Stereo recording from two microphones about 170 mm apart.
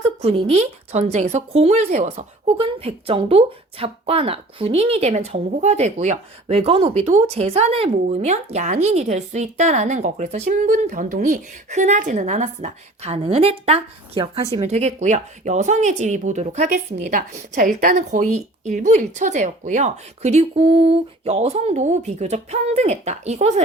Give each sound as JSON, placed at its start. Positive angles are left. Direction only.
{"t": 0.2, "sound": "a woman's voice", "side_deg": -40}